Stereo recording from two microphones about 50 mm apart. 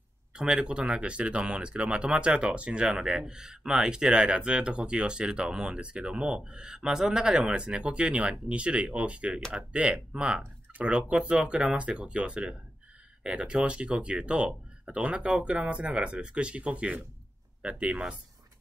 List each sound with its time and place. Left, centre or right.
0.3 s speech: centre